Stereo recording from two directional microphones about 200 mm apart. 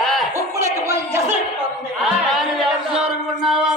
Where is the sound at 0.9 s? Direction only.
15° right (ahead or behind).